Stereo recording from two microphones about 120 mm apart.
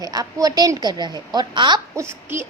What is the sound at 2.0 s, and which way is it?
Speech, 20° right (ahead or behind).